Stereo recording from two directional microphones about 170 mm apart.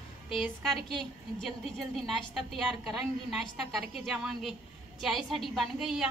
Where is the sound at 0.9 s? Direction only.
Centre (ahead or behind).